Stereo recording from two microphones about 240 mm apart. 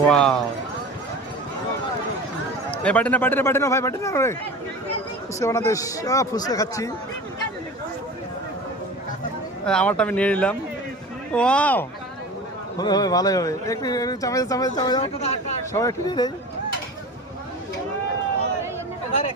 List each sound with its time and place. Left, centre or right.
0.1 s speech: centre
2.8 s speech: centre
5.4 s speech: centre
9.6 s speech: centre; by 15.5 s left
15.7 s speech: centre